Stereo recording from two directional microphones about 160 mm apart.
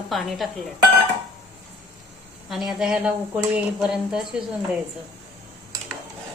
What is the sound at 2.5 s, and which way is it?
Speech, 5° right (ahead or behind).